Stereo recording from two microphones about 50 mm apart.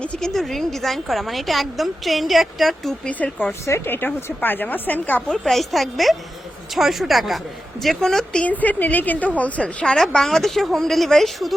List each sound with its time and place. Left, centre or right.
0.2 s a woman's voice: centre
3.4 s a woman's voice: left
5.3 s a woman's voice: centre
8.4 s a woman's voice: left; by 11.5 s centre